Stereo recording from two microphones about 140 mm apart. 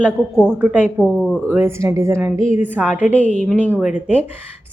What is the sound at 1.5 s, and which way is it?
A woman's voice, 15° right (ahead or behind).